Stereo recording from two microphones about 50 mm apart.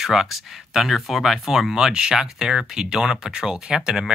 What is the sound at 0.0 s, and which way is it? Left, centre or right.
Speech, centre.